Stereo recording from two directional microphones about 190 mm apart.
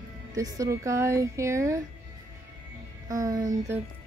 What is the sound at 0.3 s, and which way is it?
Speech, 20° right (ahead or behind).